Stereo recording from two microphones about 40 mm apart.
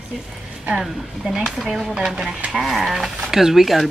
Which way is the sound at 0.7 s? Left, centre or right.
Centre.